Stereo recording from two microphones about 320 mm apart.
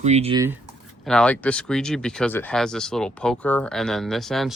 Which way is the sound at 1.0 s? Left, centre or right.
Centre.